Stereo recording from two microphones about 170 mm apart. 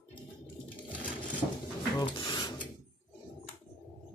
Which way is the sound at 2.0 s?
25° left (ahead or behind).